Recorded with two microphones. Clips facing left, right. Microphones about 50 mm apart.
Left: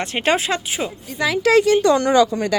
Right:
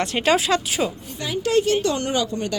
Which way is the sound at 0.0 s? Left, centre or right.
Left.